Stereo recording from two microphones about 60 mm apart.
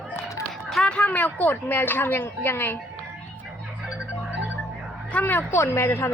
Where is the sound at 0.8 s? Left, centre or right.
Centre.